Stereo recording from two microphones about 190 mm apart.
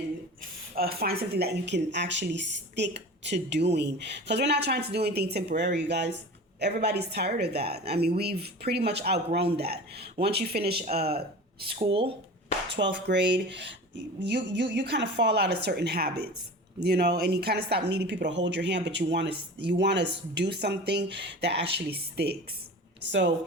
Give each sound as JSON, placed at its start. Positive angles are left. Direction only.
{"t": 0.8, "sound": "a woman's voice", "side_deg": -55}
{"t": 12.7, "sound": "a woman's voice", "side_deg": -65}